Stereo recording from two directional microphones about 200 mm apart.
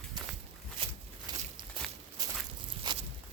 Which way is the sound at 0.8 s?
25° right (ahead or behind).